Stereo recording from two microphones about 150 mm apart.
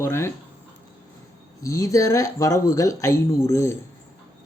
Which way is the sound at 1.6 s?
20° left (ahead or behind).